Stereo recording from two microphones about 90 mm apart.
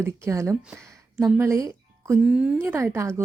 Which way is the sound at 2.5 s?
25° right (ahead or behind).